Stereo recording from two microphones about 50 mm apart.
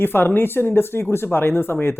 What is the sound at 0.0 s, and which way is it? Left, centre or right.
Speech, left.